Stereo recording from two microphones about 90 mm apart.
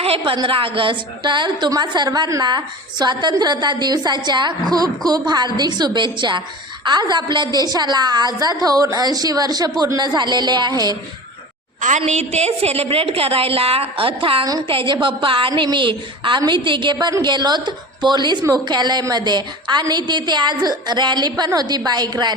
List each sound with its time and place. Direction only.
0.0 s a woman's voice: 90° right; by 10.9 s 50° right (ahead or behind)
12.7 s a woman's voice: 90° right
15.0 s a woman's voice: 70° right (ahead or behind); by 22.4 s 50° right (ahead or behind)